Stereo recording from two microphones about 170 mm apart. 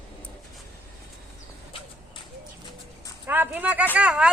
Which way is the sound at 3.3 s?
10° right (ahead or behind).